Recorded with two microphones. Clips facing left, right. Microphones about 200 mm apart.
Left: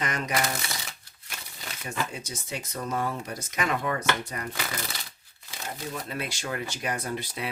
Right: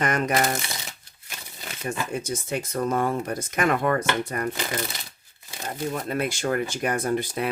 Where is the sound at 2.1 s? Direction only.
55° right (ahead or behind).